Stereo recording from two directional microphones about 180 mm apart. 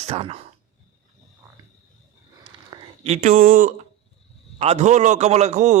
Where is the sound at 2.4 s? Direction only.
25° right (ahead or behind); by 3.8 s 50° right (ahead or behind).